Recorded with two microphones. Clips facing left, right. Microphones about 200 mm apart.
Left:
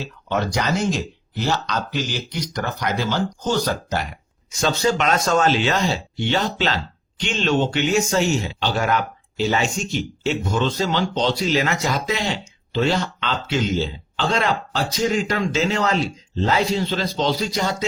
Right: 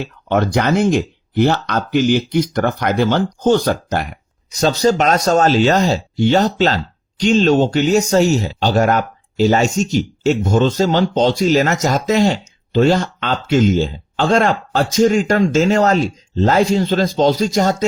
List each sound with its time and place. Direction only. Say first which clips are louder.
0.0 s speech: right 6 dB; 55° right (ahead or behind)
4.5 s speech: right 6 dB; 40° right (ahead or behind)